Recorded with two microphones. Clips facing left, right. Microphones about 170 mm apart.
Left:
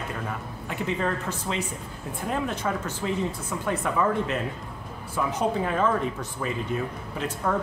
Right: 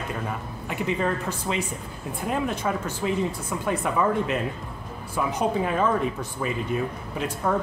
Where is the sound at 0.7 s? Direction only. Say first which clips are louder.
Right 2 dB; 10° right (ahead or behind).